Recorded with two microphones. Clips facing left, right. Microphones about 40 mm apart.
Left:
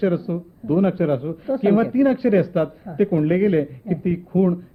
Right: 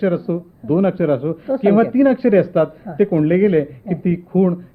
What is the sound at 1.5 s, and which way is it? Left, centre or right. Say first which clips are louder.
Speech: right 4 dB; centre.